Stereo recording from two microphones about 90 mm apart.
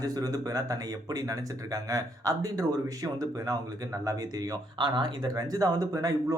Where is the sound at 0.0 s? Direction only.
45° right (ahead or behind).